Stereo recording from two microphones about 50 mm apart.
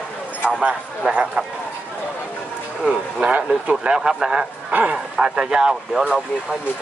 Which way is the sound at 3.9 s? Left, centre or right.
Centre.